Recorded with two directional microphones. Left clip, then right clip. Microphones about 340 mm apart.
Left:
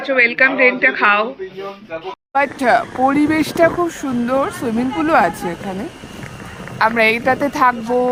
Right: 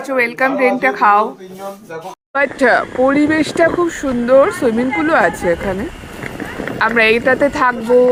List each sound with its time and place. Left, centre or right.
0.1 s a woman's voice: centre
2.3 s speech: centre
6.7 s speech: centre